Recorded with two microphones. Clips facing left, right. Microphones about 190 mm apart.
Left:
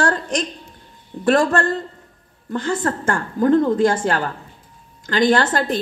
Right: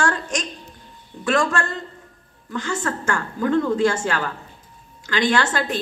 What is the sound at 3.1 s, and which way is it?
A woman's voice, 50° left (ahead or behind).